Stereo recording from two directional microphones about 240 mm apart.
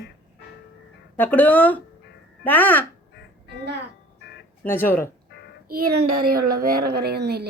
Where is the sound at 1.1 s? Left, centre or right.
Centre.